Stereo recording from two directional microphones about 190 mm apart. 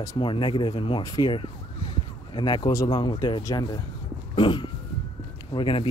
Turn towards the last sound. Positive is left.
turn(degrees=25)  # may be behind; listen again after turning